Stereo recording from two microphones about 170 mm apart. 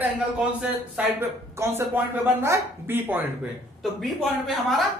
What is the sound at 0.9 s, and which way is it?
Speech, 15° right (ahead or behind).